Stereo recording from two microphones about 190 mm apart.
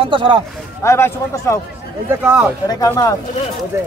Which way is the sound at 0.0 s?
25° right (ahead or behind).